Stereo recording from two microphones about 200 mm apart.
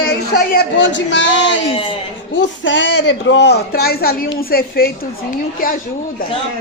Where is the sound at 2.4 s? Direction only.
65° left (ahead or behind); by 5.8 s 45° left (ahead or behind).